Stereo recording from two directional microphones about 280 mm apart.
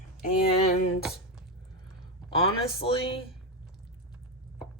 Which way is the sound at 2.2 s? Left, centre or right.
Centre.